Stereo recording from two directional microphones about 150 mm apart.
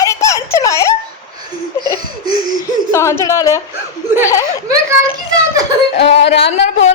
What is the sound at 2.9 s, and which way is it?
Speech, 20° left (ahead or behind).